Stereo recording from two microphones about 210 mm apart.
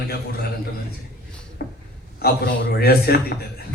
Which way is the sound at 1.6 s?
50° left (ahead or behind).